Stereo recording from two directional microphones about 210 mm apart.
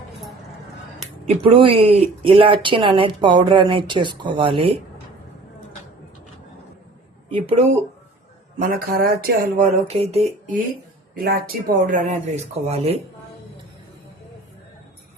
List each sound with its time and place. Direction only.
1.3 s speech: 25° right (ahead or behind)
7.3 s speech: 25° right (ahead or behind)
8.5 s speech: 45° right (ahead or behind)
9.8 s speech: 30° right (ahead or behind)
11.1 s speech: 45° right (ahead or behind); by 13.0 s 30° right (ahead or behind)